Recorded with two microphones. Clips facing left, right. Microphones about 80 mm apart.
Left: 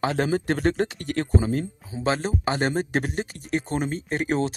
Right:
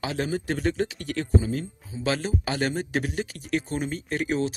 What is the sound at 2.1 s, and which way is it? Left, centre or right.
Speech, left.